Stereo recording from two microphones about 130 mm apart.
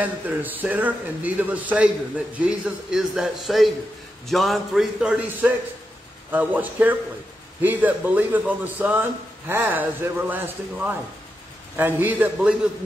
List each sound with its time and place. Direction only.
0.0 s a man's voice: 15° right (ahead or behind)